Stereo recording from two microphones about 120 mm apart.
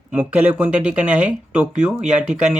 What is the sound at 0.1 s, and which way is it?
Speech, 10° right (ahead or behind).